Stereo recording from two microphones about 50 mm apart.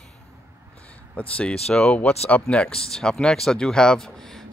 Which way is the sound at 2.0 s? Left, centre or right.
Left.